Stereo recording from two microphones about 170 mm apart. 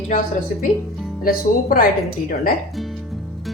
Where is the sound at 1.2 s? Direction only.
60° left (ahead or behind).